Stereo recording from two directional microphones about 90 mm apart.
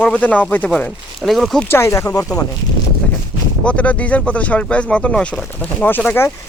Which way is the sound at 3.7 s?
15° left (ahead or behind).